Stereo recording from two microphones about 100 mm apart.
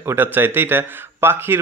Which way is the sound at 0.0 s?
20° right (ahead or behind).